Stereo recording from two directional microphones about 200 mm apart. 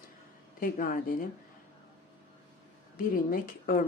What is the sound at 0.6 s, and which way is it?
Speech, 45° left (ahead or behind).